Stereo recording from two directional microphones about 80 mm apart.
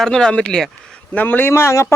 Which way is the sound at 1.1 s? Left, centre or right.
Left.